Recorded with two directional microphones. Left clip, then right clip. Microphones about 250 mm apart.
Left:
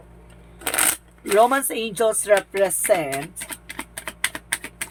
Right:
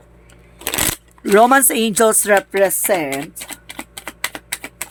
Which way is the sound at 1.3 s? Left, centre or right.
Right.